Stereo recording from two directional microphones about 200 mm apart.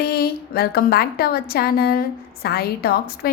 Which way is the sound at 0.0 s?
50° left (ahead or behind).